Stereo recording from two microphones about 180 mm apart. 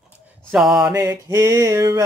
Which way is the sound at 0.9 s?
15° right (ahead or behind).